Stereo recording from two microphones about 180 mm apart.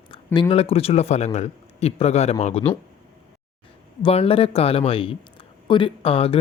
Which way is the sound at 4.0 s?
30° left (ahead or behind).